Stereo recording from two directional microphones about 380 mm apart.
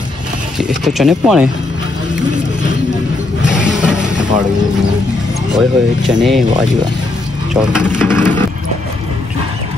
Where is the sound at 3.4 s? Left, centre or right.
Centre.